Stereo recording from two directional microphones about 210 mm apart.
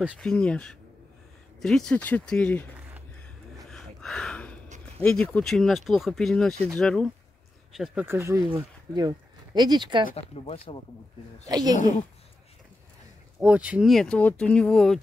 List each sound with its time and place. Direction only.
0.2 s speech: 5° left (ahead or behind)
3.7 s a sound: 5° left (ahead or behind)
4.9 s speech: 5° left (ahead or behind); by 10.0 s 20° right (ahead or behind)
10.0 s speech: 30° left (ahead or behind)
11.4 s a woman's voice: 15° right (ahead or behind)
13.4 s speech: 5° right (ahead or behind)